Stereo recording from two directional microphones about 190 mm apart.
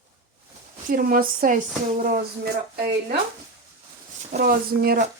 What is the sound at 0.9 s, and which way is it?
Speech, 50° right (ahead or behind).